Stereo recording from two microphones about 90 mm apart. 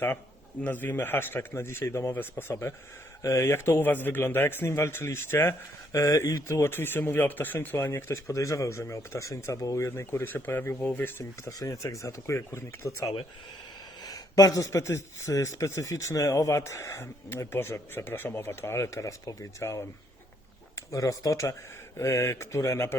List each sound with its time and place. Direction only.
0.6 s speech: 20° left (ahead or behind)
5.9 s speech: 35° left (ahead or behind); by 11.1 s 15° left (ahead or behind)
11.2 s speech: 40° left (ahead or behind)
14.0 s speech: 45° left (ahead or behind)